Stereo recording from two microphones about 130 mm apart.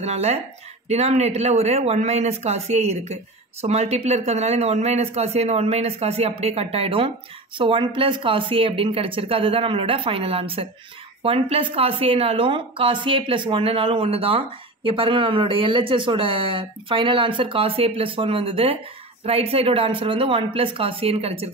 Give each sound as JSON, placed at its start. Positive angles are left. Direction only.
{"t": 0.0, "sound": "speech", "side_deg": -55}